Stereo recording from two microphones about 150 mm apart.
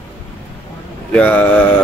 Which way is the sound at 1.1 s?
10° left (ahead or behind).